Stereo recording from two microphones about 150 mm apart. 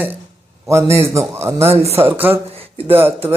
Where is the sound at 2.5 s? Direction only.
40° right (ahead or behind).